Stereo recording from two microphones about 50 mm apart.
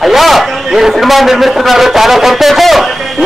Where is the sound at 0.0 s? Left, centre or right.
Centre.